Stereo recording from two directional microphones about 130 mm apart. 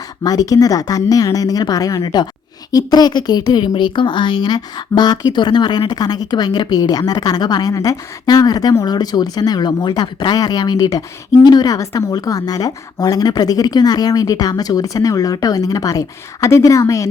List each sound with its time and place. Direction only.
0.2 s a woman's voice: 30° left (ahead or behind)